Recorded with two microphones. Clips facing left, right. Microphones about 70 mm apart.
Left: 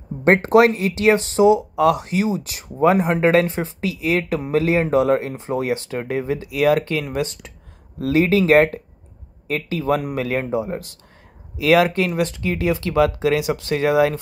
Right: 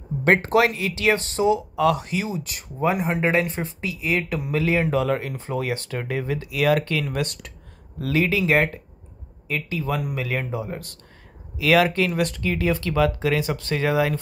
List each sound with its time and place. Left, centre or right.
0.4 s speech: left
2.8 s speech: left
3.3 s speech: left
4.4 s speech: left
10.5 s speech: left